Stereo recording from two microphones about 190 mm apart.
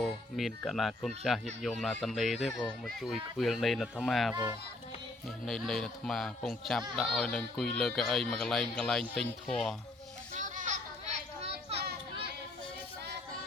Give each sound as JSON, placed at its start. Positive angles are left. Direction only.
{"t": 0.3, "sound": "speech", "side_deg": 0}
{"t": 5.5, "sound": "speech", "side_deg": 5}
{"t": 10.3, "sound": "a sound", "side_deg": -40}